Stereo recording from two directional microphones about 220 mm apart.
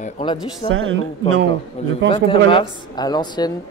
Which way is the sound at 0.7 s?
60° right (ahead or behind).